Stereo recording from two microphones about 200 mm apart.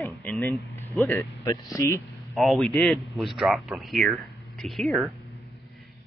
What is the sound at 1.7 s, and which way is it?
Speech, 15° left (ahead or behind).